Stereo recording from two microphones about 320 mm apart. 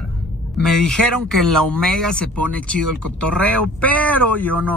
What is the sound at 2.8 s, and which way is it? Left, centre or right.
Speech, right.